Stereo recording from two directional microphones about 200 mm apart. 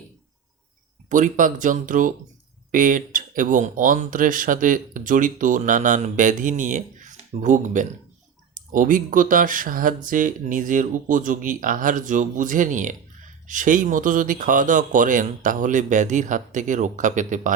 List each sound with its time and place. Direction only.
1.1 s speech: 40° right (ahead or behind)